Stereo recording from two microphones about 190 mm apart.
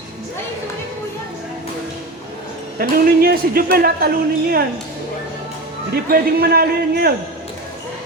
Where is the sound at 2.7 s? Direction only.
50° right (ahead or behind).